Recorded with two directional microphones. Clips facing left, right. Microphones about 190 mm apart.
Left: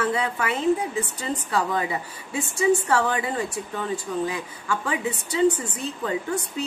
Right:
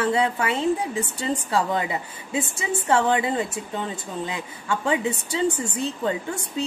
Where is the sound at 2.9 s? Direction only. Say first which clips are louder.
Right 3 dB; 25° right (ahead or behind).